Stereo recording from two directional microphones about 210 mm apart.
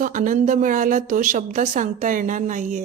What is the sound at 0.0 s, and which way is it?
A woman's voice, 40° right (ahead or behind).